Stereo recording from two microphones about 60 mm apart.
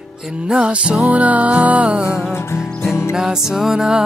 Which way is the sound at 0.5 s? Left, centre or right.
Centre.